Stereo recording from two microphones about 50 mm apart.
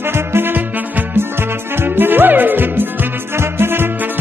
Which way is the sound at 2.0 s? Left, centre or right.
Right.